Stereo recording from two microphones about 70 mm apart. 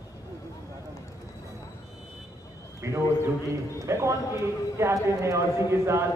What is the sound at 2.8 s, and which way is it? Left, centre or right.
A man's voice, right.